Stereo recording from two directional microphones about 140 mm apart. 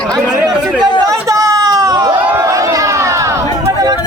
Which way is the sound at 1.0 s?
25° right (ahead or behind).